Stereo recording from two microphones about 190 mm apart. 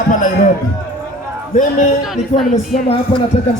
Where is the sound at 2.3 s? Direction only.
30° left (ahead or behind).